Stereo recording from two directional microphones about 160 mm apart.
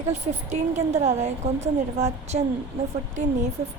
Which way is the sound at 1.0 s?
45° right (ahead or behind).